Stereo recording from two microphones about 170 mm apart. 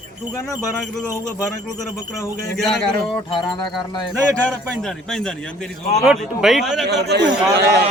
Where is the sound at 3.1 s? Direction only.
25° left (ahead or behind).